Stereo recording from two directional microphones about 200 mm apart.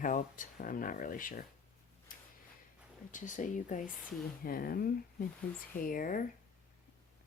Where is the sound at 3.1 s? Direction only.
40° left (ahead or behind).